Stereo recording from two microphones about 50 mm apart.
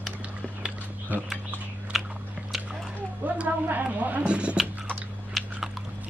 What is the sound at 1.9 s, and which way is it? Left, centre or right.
Biting, centre.